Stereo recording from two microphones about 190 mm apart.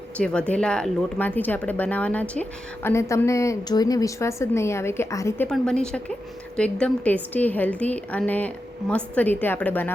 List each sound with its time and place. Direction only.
0.2 s a woman's voice: 5° left (ahead or behind)